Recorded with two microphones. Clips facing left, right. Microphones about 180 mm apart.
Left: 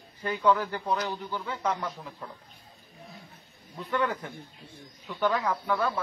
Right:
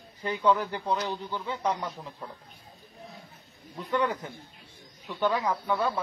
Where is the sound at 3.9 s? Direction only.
15° right (ahead or behind).